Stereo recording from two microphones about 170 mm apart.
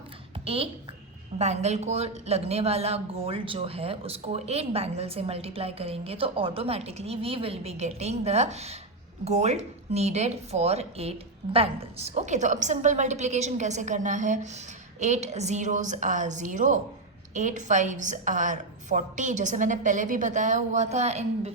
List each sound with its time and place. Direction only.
0.4 s a woman's voice: 35° right (ahead or behind)